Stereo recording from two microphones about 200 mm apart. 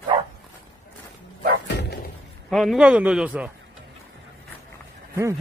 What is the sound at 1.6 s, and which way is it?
Dog, 55° left (ahead or behind).